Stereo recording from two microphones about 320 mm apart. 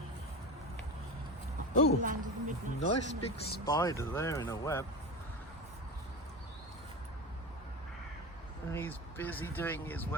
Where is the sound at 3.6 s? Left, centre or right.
Centre.